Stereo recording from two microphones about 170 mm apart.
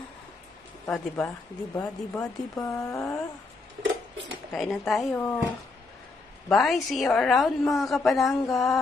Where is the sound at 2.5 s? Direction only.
20° left (ahead or behind).